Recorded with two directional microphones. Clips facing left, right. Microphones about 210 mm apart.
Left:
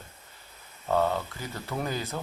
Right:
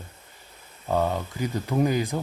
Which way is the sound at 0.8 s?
15° right (ahead or behind).